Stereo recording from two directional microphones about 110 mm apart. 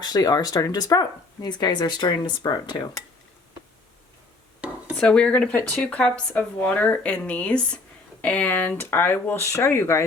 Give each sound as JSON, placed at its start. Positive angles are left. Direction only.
{"t": 0.0, "sound": "speech", "side_deg": 35}
{"t": 4.9, "sound": "speech", "side_deg": 10}